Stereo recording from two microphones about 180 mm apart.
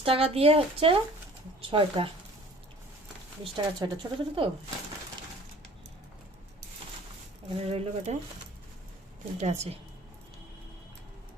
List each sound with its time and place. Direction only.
0.0 s speech: 30° right (ahead or behind)
3.4 s speech: 25° right (ahead or behind)
7.6 s speech: 35° right (ahead or behind)
9.4 s speech: 40° right (ahead or behind)